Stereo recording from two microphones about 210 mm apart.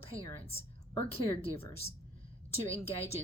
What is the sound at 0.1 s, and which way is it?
Speech, 25° left (ahead or behind).